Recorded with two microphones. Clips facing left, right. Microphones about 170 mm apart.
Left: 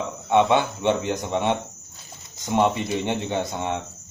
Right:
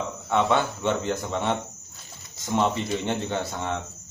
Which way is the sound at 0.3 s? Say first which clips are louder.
Left 4 dB; 20° left (ahead or behind).